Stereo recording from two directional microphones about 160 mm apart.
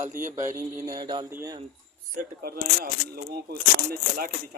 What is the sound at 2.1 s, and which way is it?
Speech, 65° right (ahead or behind).